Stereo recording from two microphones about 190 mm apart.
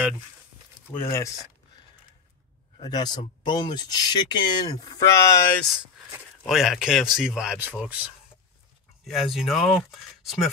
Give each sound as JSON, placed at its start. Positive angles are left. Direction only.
{"t": 0.9, "sound": "speech", "side_deg": 15}
{"t": 2.8, "sound": "speech", "side_deg": 20}
{"t": 6.4, "sound": "speech", "side_deg": 0}